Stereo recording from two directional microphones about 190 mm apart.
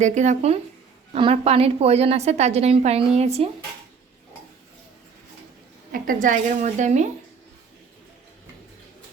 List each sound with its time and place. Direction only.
0.0 s a woman's voice: 40° right (ahead or behind)
5.9 s a woman's voice: 45° right (ahead or behind)